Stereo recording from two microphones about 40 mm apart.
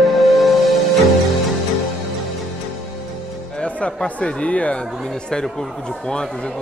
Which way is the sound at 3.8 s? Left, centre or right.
Left.